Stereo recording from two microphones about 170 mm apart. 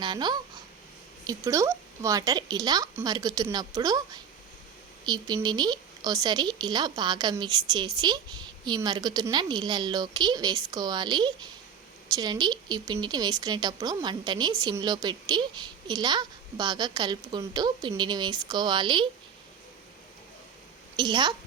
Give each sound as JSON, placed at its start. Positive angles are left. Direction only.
{"t": 0.0, "sound": "speech", "side_deg": -25}
{"t": 20.9, "sound": "a woman's voice", "side_deg": -30}